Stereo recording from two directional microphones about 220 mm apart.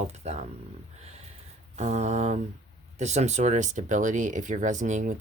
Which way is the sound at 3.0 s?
30° right (ahead or behind).